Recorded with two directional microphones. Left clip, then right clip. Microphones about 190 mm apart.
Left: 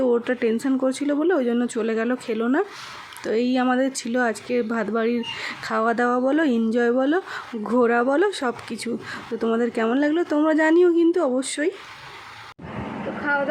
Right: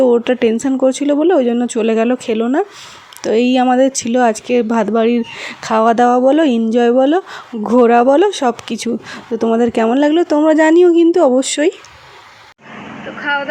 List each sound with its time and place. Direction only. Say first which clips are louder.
0.0 s speech: right 9 dB; 30° right (ahead or behind)
13.3 s speech: right 5 dB; centre (ahead or behind)